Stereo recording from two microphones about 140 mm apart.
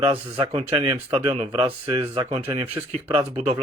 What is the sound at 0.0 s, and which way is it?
Speech, 40° right (ahead or behind).